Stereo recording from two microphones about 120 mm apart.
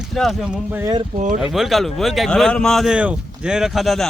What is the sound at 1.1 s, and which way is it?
Speech, 90° right.